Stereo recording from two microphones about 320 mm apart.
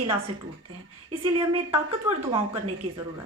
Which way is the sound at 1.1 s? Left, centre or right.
Centre.